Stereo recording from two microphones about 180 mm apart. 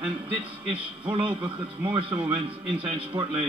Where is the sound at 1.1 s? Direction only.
30° right (ahead or behind).